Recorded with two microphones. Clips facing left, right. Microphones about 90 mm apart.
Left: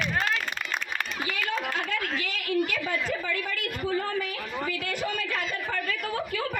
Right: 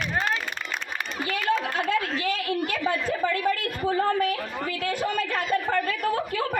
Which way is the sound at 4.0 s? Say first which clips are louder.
Right 7 dB; 45° right (ahead or behind).